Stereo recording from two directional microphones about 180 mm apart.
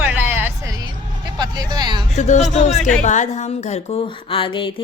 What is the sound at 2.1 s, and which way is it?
Speech, 40° left (ahead or behind).